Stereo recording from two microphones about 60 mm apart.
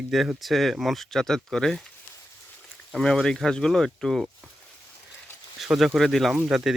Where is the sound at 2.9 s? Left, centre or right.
Centre.